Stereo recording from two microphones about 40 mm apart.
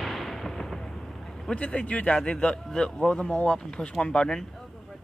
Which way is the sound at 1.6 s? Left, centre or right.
Left.